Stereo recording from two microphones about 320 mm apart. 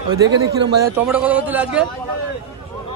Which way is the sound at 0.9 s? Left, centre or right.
Centre.